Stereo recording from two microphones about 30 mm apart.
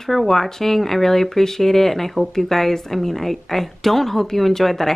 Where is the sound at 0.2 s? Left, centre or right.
Centre.